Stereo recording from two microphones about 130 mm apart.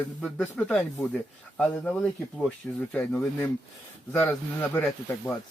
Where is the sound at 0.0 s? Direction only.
10° left (ahead or behind).